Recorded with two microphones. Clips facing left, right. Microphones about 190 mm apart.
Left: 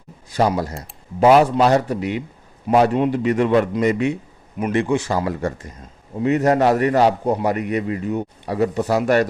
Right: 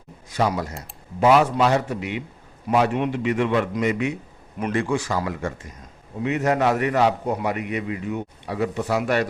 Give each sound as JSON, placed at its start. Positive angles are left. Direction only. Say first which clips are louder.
{"t": 0.3, "sound": "a man's voice", "louder": "left 4 dB", "side_deg": 35}
{"t": 4.7, "sound": "a man's voice", "louder": "left 4 dB", "side_deg": 20}